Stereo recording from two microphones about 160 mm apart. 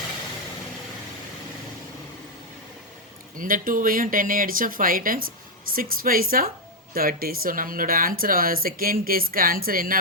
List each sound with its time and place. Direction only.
3.3 s speech: 60° right (ahead or behind)